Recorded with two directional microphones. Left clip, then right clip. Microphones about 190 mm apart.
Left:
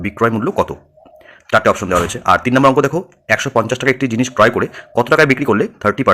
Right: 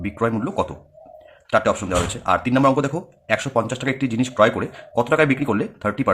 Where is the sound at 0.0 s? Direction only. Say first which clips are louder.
Left 7 dB; 30° left (ahead or behind).